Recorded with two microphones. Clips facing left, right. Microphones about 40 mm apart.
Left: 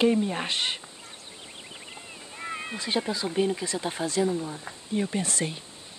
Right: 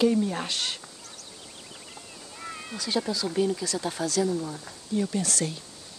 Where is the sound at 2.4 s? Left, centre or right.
Left.